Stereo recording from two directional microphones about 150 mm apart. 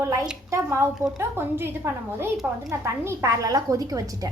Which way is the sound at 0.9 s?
Centre (ahead or behind).